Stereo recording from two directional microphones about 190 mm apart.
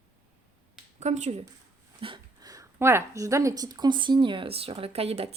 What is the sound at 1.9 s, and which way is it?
Speech, 25° right (ahead or behind).